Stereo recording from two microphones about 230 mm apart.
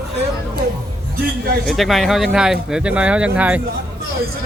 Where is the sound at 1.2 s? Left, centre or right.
Right.